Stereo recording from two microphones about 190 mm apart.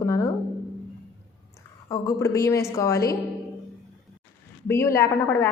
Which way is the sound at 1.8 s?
15° left (ahead or behind).